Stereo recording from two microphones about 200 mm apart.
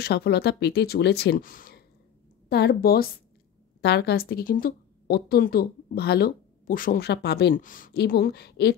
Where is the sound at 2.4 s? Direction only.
55° left (ahead or behind).